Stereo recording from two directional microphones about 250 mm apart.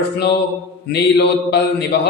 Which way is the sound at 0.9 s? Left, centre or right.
Left.